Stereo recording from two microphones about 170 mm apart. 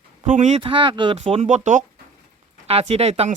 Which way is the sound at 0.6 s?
30° right (ahead or behind).